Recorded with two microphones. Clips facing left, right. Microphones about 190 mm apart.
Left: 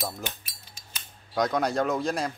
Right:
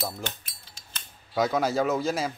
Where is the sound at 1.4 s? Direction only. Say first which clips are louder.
Right 1 dB; 5° right (ahead or behind).